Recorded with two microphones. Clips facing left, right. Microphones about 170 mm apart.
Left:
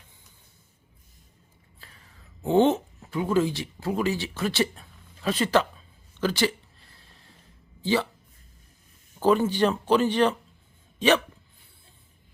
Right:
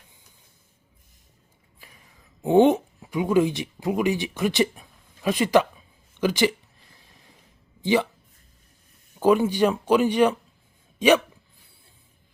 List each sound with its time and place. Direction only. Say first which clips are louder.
1.8 s whispering: right 1 dB; 15° right (ahead or behind)
2.4 s speech: right 3 dB; 15° right (ahead or behind)
7.8 s speech: right 3 dB; 15° right (ahead or behind)
9.2 s speech: right 2 dB; 10° right (ahead or behind)